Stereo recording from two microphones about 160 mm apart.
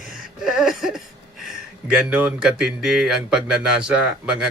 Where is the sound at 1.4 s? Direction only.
5° right (ahead or behind).